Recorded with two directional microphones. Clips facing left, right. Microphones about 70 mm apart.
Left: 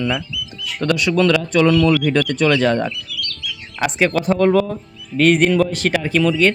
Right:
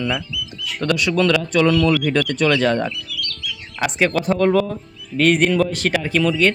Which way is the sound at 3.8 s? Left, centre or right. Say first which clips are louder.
Left 1 dB; left.